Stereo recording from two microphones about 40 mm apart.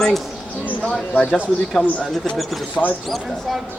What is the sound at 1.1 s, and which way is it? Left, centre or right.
Speech, left.